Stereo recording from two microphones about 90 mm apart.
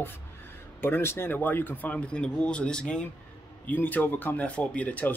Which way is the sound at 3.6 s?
20° left (ahead or behind).